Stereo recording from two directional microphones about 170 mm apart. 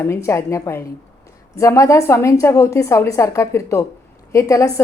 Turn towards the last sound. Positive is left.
turn(degrees=20)  # may be behind; listen again after turning